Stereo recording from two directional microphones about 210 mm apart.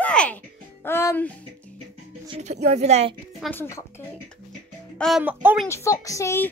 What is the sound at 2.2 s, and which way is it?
Speech, 30° right (ahead or behind).